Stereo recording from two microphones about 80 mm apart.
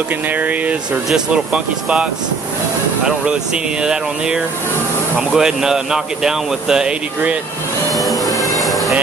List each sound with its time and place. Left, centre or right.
0.3 s speech: centre
3.8 s speech: centre
7.9 s music: centre